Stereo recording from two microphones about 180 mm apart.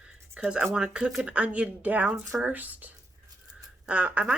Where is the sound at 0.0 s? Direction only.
5° right (ahead or behind).